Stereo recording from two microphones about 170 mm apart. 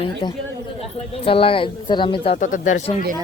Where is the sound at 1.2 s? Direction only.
30° left (ahead or behind).